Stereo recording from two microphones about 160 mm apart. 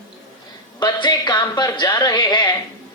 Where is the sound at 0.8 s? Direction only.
30° left (ahead or behind).